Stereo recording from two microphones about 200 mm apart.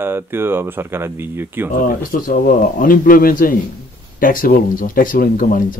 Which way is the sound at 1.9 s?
45° left (ahead or behind).